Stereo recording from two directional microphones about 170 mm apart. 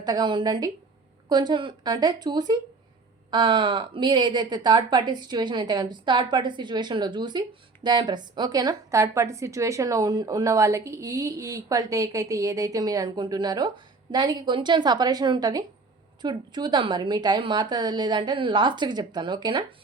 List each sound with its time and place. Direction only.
0.0 s a woman's voice: 25° right (ahead or behind)